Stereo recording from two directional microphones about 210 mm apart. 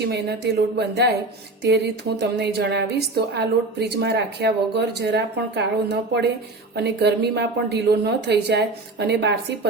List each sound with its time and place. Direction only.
0.1 s speech: 50° right (ahead or behind)